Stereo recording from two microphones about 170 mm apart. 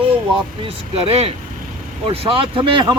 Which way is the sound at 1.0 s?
35° right (ahead or behind).